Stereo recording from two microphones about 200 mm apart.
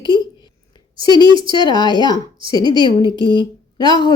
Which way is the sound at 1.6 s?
20° left (ahead or behind).